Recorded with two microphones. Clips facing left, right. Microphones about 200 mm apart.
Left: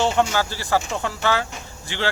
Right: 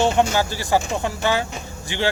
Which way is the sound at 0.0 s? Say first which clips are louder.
Right 2 dB; 15° right (ahead or behind).